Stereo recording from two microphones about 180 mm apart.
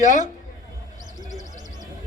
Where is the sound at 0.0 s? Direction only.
45° left (ahead or behind).